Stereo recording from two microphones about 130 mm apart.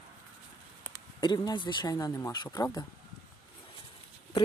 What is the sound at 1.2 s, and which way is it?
Speech, 35° left (ahead or behind).